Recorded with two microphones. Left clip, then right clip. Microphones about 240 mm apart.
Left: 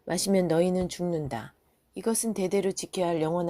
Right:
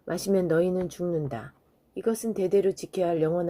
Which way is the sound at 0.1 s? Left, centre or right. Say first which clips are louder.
Right 1 dB; left.